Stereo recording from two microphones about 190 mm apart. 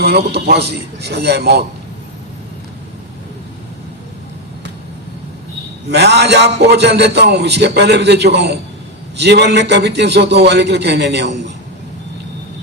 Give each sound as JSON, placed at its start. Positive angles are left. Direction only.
{"t": 0.0, "sound": "a man's voice", "side_deg": -55}
{"t": 5.9, "sound": "a man's voice", "side_deg": -60}